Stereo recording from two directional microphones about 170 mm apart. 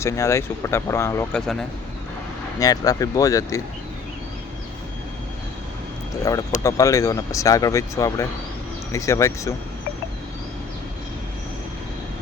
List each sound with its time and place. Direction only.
0.0 s speech: 15° left (ahead or behind)
1.4 s speech: 5° left (ahead or behind)
2.6 s speech: 20° left (ahead or behind)
6.3 s speech: 20° left (ahead or behind)